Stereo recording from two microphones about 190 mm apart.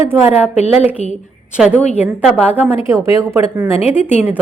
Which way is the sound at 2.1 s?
5° right (ahead or behind).